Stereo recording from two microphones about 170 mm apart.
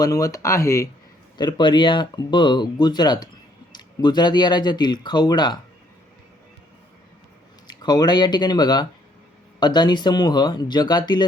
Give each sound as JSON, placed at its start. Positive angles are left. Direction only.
{"t": 0.0, "sound": "speech", "side_deg": 20}
{"t": 7.7, "sound": "speech", "side_deg": 25}